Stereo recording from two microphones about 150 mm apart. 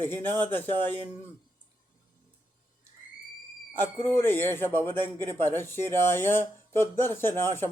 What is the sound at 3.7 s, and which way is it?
A man's voice, 15° left (ahead or behind).